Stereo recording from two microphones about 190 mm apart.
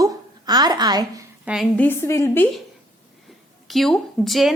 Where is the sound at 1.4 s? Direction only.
5° right (ahead or behind).